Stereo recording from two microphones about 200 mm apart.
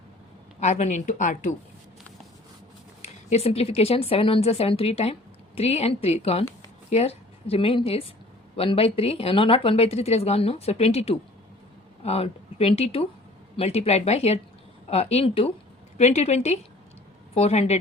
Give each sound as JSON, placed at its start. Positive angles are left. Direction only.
{"t": 0.6, "sound": "speech", "side_deg": 35}
{"t": 3.0, "sound": "a woman's voice", "side_deg": 35}